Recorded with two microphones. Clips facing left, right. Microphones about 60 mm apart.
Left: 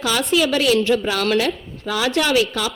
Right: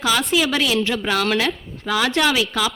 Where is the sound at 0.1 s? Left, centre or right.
Right.